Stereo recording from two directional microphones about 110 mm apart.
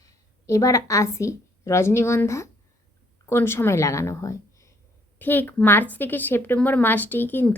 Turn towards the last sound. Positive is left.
turn(degrees=20)  # may be behind; listen again after turning